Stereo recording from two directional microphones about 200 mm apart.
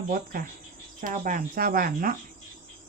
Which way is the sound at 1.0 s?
40° right (ahead or behind).